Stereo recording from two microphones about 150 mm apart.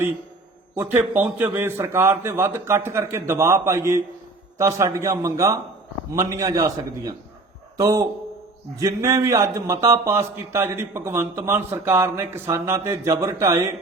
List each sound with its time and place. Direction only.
0.8 s a man's voice: 10° right (ahead or behind)